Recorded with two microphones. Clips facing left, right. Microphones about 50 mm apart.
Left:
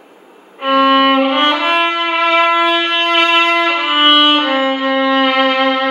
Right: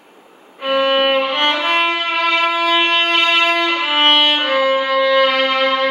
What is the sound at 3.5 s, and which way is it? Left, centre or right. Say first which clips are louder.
Violin: left 3 dB; left.